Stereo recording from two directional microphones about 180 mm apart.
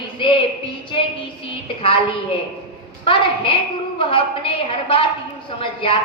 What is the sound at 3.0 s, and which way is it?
A man's voice, 30° left (ahead or behind).